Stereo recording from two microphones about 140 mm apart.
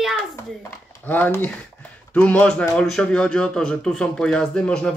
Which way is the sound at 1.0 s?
15° left (ahead or behind).